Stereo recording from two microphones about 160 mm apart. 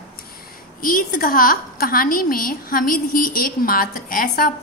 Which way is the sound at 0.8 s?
60° left (ahead or behind).